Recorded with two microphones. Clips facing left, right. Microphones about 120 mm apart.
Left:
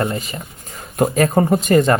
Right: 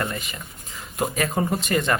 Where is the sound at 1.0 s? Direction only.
45° left (ahead or behind).